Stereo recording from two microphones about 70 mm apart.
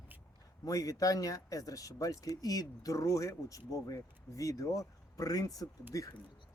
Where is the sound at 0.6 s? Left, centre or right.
Left.